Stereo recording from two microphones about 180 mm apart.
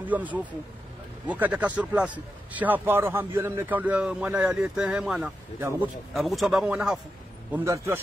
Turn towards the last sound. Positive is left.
turn(degrees=-15)  # may be behind; listen again after turning